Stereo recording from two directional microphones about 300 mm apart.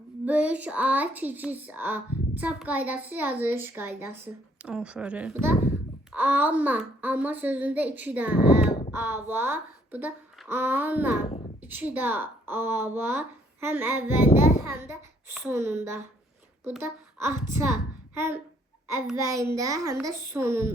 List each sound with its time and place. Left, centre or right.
0.3 s a woman's voice: centre